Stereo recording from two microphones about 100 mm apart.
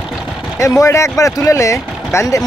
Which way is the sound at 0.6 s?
30° left (ahead or behind).